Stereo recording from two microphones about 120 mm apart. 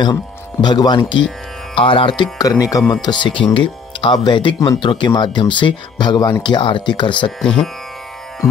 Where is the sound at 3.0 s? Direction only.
40° left (ahead or behind).